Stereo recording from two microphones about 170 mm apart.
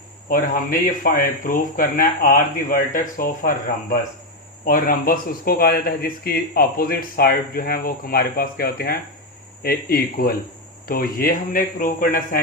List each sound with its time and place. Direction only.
0.3 s speech: 55° left (ahead or behind)